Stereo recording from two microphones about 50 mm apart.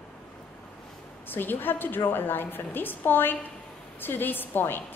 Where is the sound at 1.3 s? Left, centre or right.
Left.